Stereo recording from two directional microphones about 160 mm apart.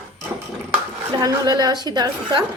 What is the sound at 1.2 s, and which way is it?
A woman's voice, 25° right (ahead or behind).